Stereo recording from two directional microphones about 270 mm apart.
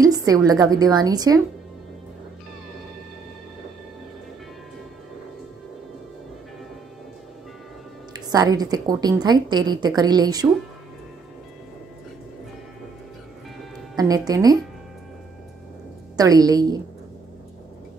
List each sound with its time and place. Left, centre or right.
0.0 s a woman's voice: centre
8.1 s a woman's voice: centre
13.9 s a woman's voice: centre
16.2 s a woman's voice: centre